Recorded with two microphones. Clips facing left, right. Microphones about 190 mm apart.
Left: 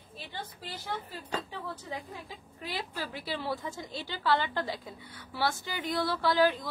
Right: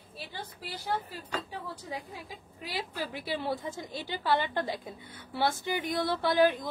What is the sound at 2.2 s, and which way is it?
A woman's voice, 15° right (ahead or behind).